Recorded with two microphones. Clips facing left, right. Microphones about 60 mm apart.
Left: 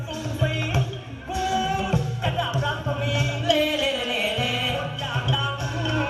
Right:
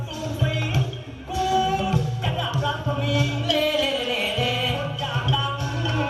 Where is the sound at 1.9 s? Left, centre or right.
Left.